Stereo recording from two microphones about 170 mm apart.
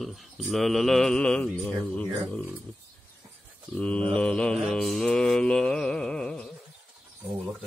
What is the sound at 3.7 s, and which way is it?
Mantra, 5° left (ahead or behind).